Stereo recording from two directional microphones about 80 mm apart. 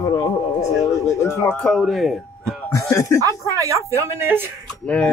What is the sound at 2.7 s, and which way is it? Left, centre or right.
Speech, left.